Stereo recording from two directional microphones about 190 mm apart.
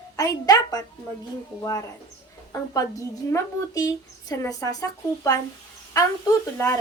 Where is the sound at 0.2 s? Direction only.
20° left (ahead or behind).